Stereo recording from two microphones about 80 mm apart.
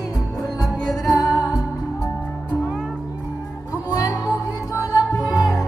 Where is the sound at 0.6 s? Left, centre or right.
Centre.